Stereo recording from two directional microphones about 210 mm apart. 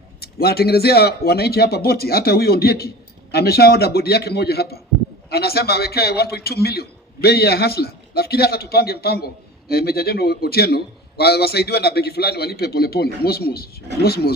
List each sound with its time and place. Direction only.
0.2 s a man's voice: 50° left (ahead or behind)